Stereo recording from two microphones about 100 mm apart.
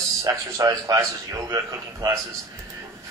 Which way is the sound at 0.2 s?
35° right (ahead or behind).